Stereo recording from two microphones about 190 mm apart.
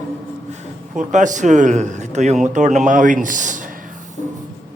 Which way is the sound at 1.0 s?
40° right (ahead or behind).